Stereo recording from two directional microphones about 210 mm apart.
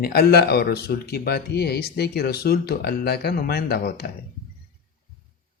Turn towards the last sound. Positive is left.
turn(degrees=45)  # may be behind; listen again after turning